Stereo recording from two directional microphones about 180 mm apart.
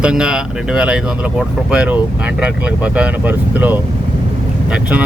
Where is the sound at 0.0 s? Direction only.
5° right (ahead or behind).